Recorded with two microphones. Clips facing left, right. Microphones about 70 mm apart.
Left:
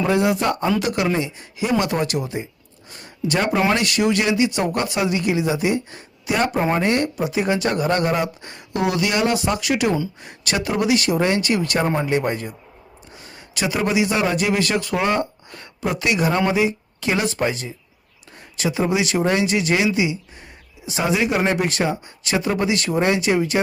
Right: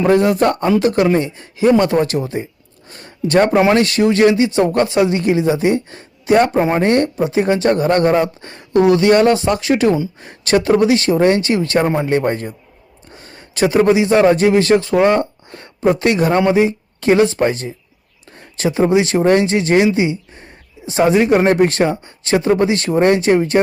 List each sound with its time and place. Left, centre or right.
0.0 s speech: right
0.8 s speech: right
3.6 s speech: right
12.0 s speech: right